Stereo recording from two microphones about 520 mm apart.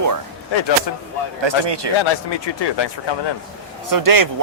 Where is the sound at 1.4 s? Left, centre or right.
Right.